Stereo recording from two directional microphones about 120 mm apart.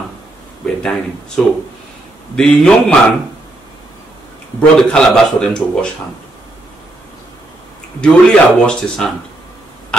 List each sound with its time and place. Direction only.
1.4 s a man's voice: 5° left (ahead or behind)
4.6 s a man's voice: 5° left (ahead or behind)
8.0 s a man's voice: 10° left (ahead or behind)